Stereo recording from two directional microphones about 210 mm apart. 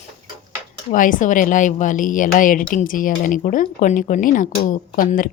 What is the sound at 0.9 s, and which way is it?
Speech, 40° left (ahead or behind).